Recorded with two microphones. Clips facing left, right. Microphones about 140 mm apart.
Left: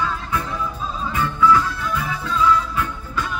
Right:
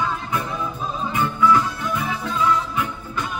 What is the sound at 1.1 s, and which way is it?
Music, 20° right (ahead or behind).